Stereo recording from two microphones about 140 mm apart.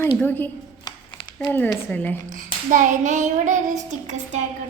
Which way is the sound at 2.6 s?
65° right (ahead or behind).